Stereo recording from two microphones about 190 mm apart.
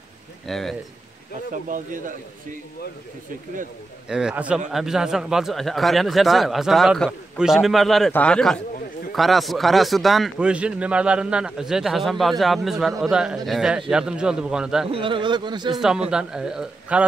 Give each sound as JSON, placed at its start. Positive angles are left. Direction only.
{"t": 0.5, "sound": "speech", "side_deg": 0}
{"t": 1.5, "sound": "speech", "side_deg": -45}
{"t": 4.1, "sound": "speech", "side_deg": -5}
{"t": 14.9, "sound": "speech", "side_deg": -25}
{"t": 15.8, "sound": "speech", "side_deg": -5}